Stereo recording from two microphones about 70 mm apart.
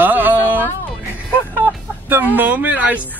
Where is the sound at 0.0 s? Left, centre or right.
Right.